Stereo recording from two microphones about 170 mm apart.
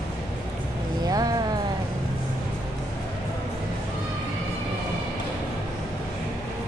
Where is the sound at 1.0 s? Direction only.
20° right (ahead or behind).